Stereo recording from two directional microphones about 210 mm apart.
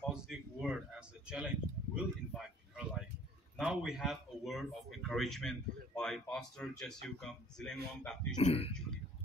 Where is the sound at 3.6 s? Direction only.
5° right (ahead or behind).